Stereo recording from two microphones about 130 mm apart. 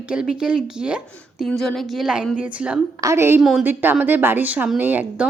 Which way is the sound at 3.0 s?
20° right (ahead or behind).